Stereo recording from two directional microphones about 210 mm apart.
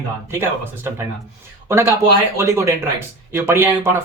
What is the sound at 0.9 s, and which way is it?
Speech, 10° right (ahead or behind).